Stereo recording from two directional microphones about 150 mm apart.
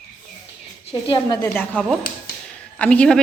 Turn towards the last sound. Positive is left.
turn(degrees=5)  # may be behind; listen again after turning